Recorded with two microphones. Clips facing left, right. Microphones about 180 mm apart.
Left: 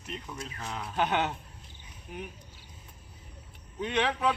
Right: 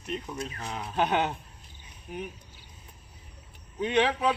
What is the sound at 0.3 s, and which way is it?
Speech, 20° right (ahead or behind).